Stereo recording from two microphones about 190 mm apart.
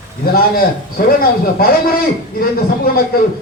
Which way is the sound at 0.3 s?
50° left (ahead or behind).